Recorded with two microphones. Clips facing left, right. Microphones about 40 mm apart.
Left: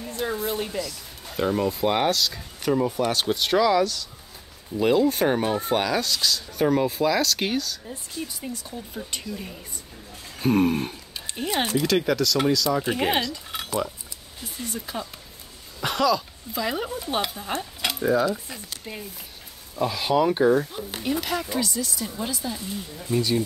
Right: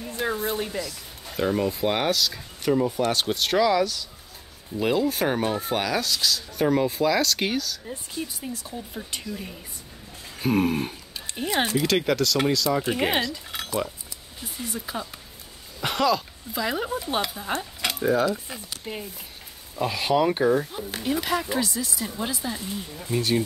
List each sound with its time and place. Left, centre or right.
0.1 s a sound: centre
0.6 s speech: centre
20.5 s speech: centre